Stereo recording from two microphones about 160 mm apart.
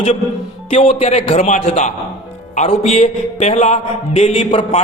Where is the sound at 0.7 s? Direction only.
40° left (ahead or behind).